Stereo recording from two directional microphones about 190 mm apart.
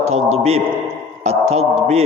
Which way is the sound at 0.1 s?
35° right (ahead or behind).